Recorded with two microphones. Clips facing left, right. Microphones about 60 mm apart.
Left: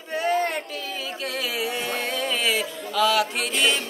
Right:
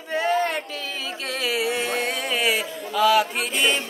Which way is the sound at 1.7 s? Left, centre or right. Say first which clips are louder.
Right 3 dB; right.